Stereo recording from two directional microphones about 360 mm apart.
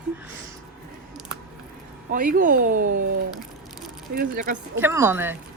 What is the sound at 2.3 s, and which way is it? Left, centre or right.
Speech, right.